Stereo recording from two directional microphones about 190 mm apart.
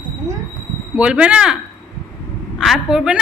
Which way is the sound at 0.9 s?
5° right (ahead or behind).